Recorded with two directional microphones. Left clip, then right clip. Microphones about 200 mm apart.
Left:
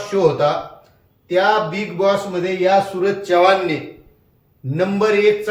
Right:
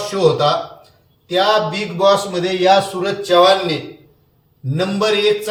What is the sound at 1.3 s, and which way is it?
Speech, 10° left (ahead or behind).